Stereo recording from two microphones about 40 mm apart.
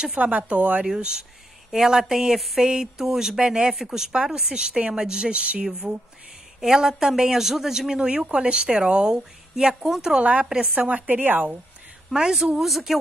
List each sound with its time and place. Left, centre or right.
0.2 s speech: right
0.8 s speech: centre
2.3 s speech: centre
2.6 s a woman's voice: centre; by 5.9 s right
6.6 s a woman's voice: centre
10.9 s a woman's voice: right
12.1 s a woman's voice: centre
12.5 s speech: centre